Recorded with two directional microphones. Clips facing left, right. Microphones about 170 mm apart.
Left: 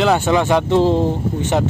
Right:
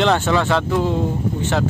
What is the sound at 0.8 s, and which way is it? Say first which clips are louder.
Speech: left 5 dB; 30° left (ahead or behind).